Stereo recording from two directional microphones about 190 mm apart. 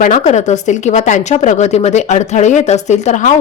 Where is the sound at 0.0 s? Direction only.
40° left (ahead or behind).